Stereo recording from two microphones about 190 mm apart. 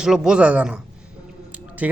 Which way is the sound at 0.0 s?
5° right (ahead or behind).